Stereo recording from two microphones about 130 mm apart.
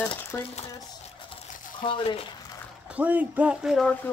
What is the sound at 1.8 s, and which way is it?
Speech, 40° left (ahead or behind).